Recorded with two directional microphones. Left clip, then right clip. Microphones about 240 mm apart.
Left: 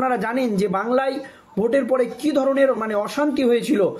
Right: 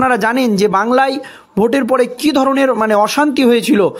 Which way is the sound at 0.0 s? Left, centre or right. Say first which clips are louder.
Right 8 dB; right.